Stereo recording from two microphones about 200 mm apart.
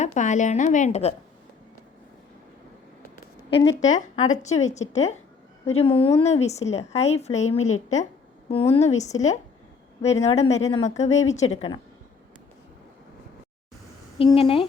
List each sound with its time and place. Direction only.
0.0 s a woman's voice: 35° left (ahead or behind)
3.5 s speech: 15° left (ahead or behind)
3.8 s a woman's voice: 35° left (ahead or behind)
14.2 s speech: 25° left (ahead or behind)